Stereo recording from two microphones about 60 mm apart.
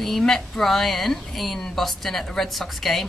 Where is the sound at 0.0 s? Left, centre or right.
Centre.